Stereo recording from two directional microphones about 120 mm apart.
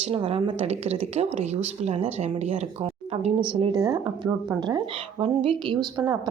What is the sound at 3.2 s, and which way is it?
Speech, 50° right (ahead or behind).